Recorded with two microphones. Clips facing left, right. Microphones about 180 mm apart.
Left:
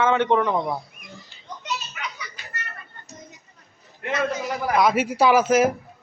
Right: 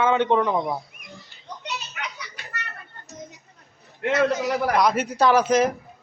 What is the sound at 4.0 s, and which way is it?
Speech, 75° right (ahead or behind).